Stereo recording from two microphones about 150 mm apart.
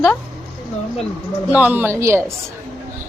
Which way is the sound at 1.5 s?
10° right (ahead or behind).